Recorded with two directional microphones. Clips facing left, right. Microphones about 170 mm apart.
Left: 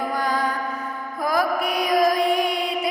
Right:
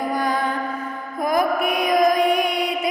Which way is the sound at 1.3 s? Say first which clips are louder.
Right 2 dB; 20° right (ahead or behind).